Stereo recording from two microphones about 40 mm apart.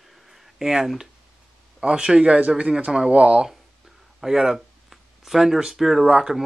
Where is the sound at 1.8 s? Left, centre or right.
Right.